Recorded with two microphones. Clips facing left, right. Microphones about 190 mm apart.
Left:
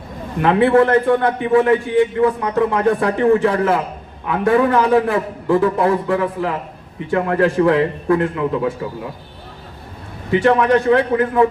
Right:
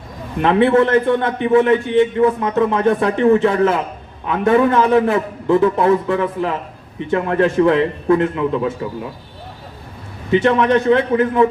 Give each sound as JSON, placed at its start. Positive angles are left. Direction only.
{"t": 0.3, "sound": "a man's voice", "side_deg": -20}
{"t": 10.3, "sound": "a man's voice", "side_deg": -20}